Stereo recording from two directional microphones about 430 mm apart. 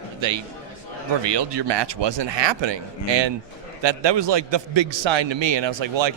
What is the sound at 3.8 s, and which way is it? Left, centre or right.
A man's voice, right.